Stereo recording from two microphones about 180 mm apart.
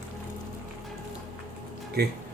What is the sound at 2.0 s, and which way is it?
Speech, 60° right (ahead or behind).